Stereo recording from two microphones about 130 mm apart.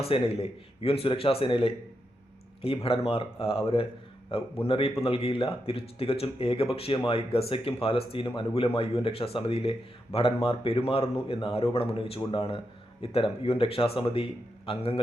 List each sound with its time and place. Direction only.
0.0 s speech: 50° left (ahead or behind)